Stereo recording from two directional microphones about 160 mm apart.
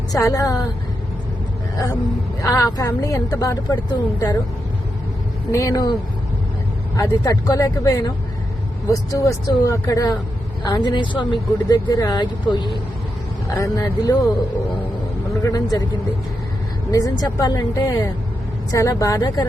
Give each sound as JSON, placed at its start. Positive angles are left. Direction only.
{"t": 0.1, "sound": "speech", "side_deg": 20}
{"t": 2.4, "sound": "speech", "side_deg": 20}
{"t": 5.5, "sound": "speech", "side_deg": 20}
{"t": 6.9, "sound": "speech", "side_deg": 20}
{"t": 15.4, "sound": "speech", "side_deg": 25}
{"t": 16.9, "sound": "speech", "side_deg": 25}